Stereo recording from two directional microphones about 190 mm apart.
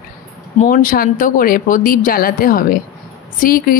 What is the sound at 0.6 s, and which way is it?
Speech, 45° left (ahead or behind).